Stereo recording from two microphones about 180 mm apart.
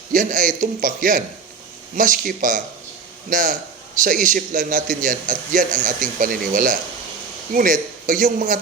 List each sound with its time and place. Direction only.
0.1 s a man's voice: 45° right (ahead or behind)